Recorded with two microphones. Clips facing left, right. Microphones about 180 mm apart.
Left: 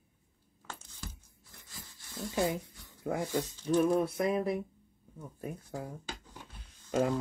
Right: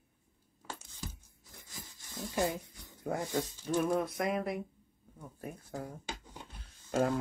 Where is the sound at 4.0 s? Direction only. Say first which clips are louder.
Left 3 dB; 30° left (ahead or behind).